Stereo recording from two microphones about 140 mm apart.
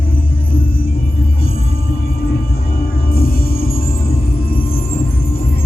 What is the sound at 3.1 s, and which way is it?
Music, 90° left.